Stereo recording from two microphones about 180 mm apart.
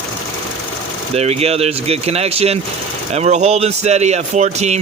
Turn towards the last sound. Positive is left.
turn(degrees=-40)  # may be behind; listen again after turning